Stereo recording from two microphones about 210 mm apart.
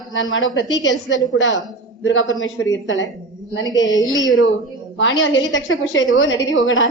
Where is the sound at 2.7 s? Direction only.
65° left (ahead or behind).